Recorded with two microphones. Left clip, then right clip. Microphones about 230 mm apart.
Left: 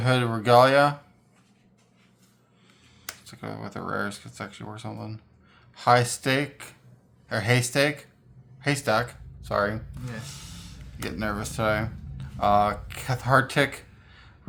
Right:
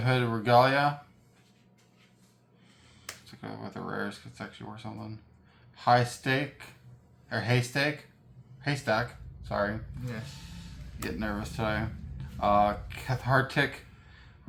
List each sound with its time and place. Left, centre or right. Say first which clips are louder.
0.0 s speech: left 4 dB; left
3.2 s speech: left 5 dB; left
10.2 s a sound: left 5 dB; left
11.2 s speech: left 7 dB; left